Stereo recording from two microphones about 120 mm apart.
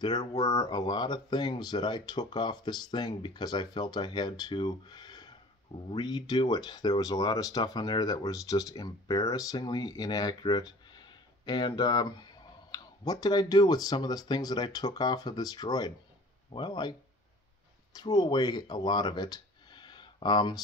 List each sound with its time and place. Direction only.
0.0 s speech: 35° left (ahead or behind)
17.9 s speech: 35° left (ahead or behind)